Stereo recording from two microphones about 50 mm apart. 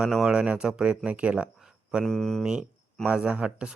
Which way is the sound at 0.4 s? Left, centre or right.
Right.